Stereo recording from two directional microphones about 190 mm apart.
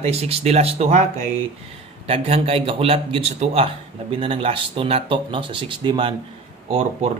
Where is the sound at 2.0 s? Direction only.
30° right (ahead or behind).